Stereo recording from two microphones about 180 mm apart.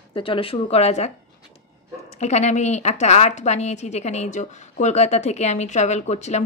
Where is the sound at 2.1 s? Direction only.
40° left (ahead or behind).